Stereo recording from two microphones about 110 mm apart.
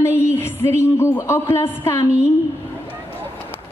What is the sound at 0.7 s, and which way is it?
Speech, 25° left (ahead or behind).